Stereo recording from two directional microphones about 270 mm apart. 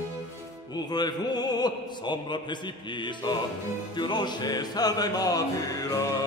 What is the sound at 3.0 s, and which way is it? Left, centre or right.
Music, centre.